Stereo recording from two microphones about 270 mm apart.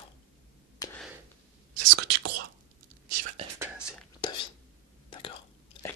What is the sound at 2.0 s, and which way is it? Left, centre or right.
Whispering, right.